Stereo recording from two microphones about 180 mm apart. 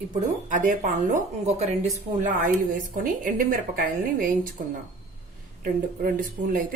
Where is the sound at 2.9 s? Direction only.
50° right (ahead or behind).